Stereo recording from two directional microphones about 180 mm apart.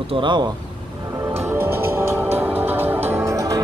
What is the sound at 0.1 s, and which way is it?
Speech, 25° right (ahead or behind).